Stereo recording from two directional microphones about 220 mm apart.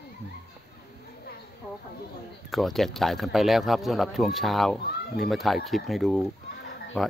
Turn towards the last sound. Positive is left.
turn(degrees=0)  # may be behind; listen again after turning